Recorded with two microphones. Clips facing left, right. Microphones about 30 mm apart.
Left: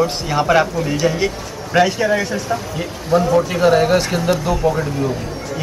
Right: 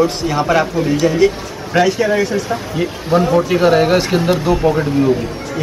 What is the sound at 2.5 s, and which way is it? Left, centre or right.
Speech, centre.